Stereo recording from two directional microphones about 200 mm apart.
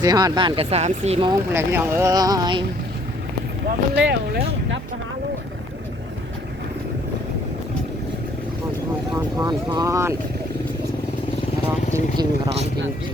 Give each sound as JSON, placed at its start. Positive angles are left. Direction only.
{"t": 0.0, "sound": "speech", "side_deg": -20}
{"t": 1.3, "sound": "speech", "side_deg": -10}
{"t": 3.9, "sound": "speech", "side_deg": -55}
{"t": 9.1, "sound": "speech", "side_deg": -20}
{"t": 12.1, "sound": "speech", "side_deg": -20}